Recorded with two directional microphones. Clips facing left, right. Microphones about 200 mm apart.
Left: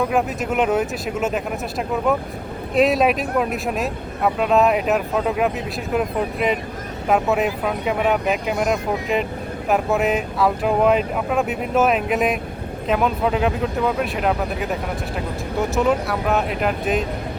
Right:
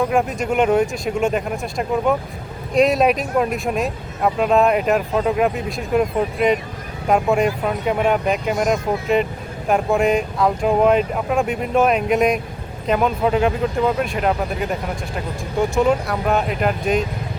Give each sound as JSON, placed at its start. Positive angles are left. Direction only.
{"t": 0.1, "sound": "speech", "side_deg": 0}